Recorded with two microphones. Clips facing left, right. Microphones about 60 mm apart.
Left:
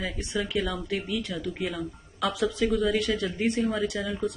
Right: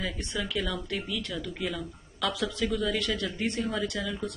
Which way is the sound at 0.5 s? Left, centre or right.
Centre.